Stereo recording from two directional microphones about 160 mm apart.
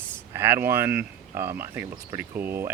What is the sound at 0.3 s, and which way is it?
Speech, 15° right (ahead or behind).